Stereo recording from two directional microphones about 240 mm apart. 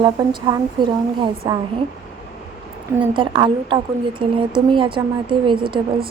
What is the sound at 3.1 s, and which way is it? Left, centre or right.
A woman's voice, centre.